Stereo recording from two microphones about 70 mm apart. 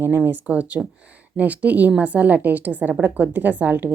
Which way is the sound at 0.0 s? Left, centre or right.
Right.